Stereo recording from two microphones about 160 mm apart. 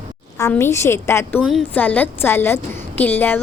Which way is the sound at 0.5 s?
15° left (ahead or behind).